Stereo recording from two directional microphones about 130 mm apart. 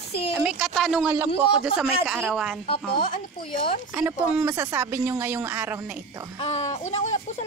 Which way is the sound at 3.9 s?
20° right (ahead or behind).